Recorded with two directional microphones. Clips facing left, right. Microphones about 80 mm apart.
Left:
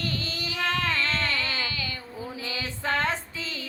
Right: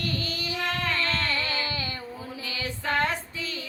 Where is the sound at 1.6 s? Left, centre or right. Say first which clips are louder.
Right 1 dB; right.